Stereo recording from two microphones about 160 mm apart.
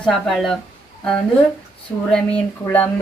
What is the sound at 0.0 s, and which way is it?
Speech, centre (ahead or behind).